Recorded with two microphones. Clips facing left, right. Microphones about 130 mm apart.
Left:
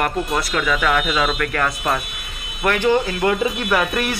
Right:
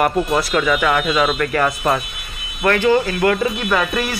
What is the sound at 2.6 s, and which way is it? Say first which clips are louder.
Speech: right 2 dB; 10° left (ahead or behind).